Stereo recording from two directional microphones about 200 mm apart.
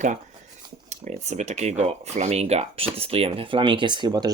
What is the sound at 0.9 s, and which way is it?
Speech, 35° right (ahead or behind).